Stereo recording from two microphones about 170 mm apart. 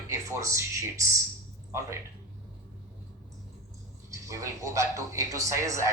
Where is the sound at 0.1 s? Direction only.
20° right (ahead or behind).